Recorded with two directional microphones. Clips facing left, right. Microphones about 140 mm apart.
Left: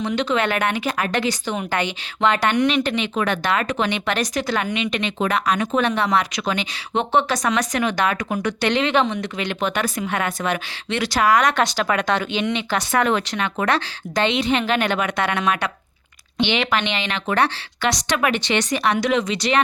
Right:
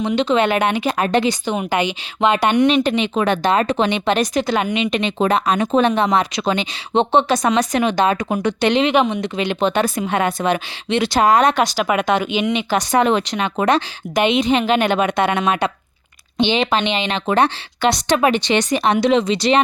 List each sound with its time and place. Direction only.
0.0 s speech: 20° right (ahead or behind)
11.8 s speech: 15° right (ahead or behind)